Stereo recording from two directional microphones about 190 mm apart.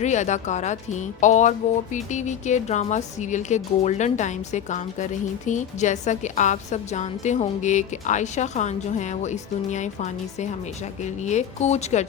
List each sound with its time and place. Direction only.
0.0 s a woman's voice: 40° left (ahead or behind)